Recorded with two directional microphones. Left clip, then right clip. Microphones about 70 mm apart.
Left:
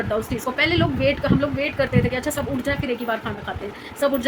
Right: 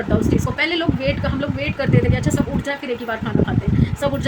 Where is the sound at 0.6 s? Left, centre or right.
Centre.